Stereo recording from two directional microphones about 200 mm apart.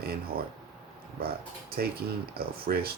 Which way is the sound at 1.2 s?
50° right (ahead or behind).